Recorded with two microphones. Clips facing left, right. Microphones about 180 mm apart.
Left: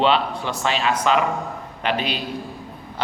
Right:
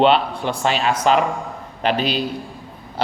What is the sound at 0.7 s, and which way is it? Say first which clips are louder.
A man's voice: right 2 dB; 40° right (ahead or behind).